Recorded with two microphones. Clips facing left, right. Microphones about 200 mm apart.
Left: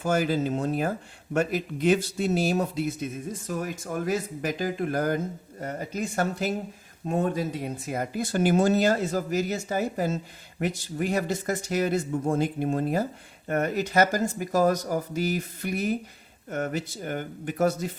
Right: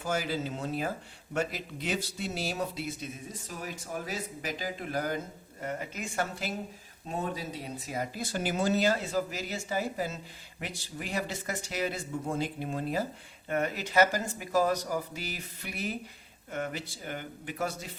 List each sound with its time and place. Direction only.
0.0 s speech: 50° left (ahead or behind)
7.1 s speech: 50° left (ahead or behind)